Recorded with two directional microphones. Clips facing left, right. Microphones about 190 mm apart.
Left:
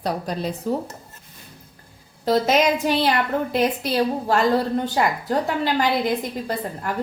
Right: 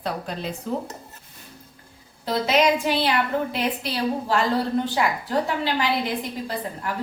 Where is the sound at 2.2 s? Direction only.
40° left (ahead or behind).